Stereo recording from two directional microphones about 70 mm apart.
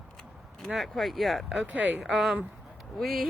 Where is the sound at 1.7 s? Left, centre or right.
Right.